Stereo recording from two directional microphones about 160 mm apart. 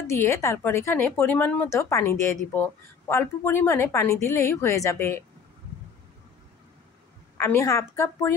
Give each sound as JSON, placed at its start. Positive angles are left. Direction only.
{"t": 0.0, "sound": "speech", "side_deg": 15}
{"t": 7.3, "sound": "speech", "side_deg": 15}